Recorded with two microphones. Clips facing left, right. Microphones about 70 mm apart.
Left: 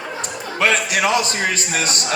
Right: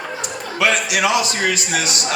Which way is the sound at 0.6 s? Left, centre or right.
Left.